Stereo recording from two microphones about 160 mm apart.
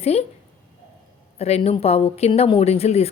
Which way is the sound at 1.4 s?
40° left (ahead or behind).